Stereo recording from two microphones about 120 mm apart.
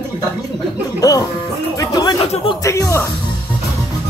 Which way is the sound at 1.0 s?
30° left (ahead or behind).